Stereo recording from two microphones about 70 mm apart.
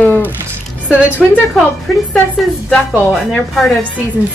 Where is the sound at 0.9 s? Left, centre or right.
Right.